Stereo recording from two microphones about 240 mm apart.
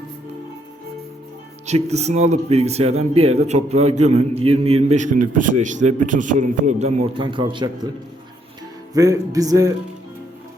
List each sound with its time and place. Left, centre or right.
1.6 s speech: right